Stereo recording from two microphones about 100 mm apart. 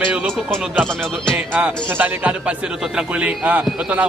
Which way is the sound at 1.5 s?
15° right (ahead or behind).